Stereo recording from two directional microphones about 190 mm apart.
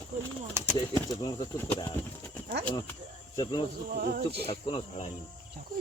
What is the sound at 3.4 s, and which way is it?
Speech, 20° left (ahead or behind).